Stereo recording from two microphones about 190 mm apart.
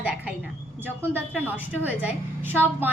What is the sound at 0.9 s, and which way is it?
A woman's voice, 10° right (ahead or behind).